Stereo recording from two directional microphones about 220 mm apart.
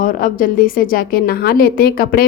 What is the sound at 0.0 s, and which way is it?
A woman's voice, 40° left (ahead or behind).